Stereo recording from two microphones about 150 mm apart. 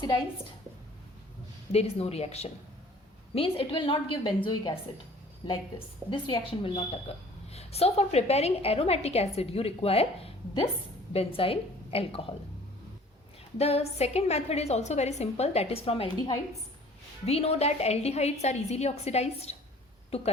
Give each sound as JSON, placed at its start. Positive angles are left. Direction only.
{"t": 1.7, "sound": "a woman's voice", "side_deg": 45}
{"t": 13.6, "sound": "a woman's voice", "side_deg": 45}